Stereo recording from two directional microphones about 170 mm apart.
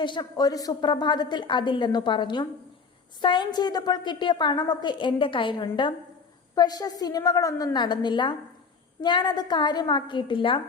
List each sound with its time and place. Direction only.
0.0 s a woman's voice: 25° left (ahead or behind)